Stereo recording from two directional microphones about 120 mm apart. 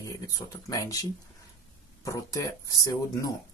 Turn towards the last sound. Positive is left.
turn(degrees=30)  # may be behind; listen again after turning